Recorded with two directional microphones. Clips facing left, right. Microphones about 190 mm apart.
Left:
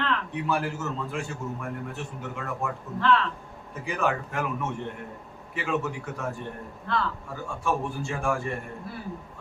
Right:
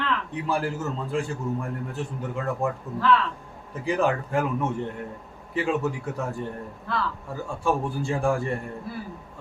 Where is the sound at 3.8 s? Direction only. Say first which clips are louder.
Right 4 dB; 35° right (ahead or behind).